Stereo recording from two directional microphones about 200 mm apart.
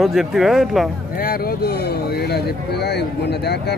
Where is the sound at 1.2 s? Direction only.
50° left (ahead or behind).